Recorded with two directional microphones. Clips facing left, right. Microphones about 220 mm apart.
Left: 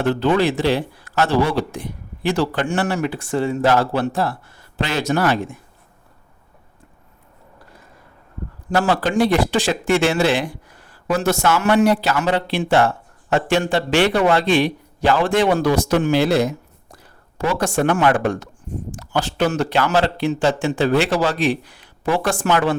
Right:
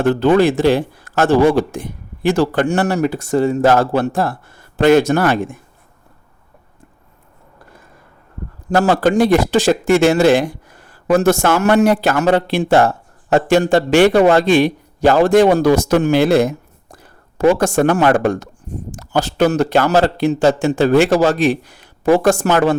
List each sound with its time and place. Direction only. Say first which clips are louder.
0.0 s speech: right 5 dB; 45° right (ahead or behind)
8.7 s speech: right 5 dB; 45° right (ahead or behind)